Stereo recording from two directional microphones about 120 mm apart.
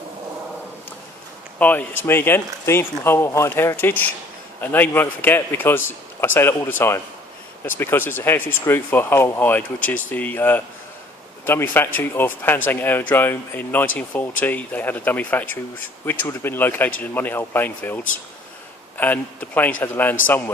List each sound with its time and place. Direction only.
1.5 s speech: 15° left (ahead or behind)